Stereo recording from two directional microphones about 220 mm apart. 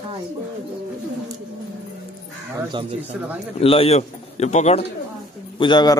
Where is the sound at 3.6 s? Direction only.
25° left (ahead or behind).